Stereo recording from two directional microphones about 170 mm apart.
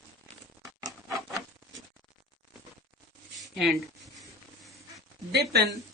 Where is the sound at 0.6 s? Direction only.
20° right (ahead or behind).